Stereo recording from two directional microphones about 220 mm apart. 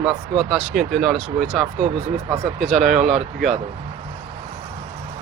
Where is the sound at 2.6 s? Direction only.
30° right (ahead or behind).